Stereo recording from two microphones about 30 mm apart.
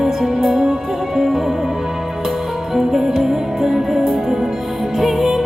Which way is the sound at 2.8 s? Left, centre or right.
Centre.